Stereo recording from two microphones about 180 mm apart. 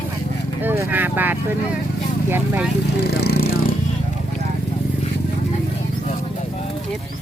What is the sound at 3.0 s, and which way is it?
Speech, 60° left (ahead or behind).